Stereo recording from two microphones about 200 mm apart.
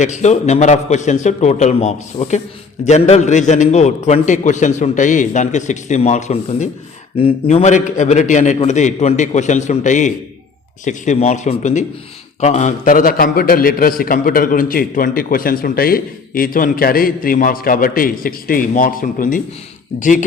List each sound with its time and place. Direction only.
0.0 s a man's voice: 35° left (ahead or behind)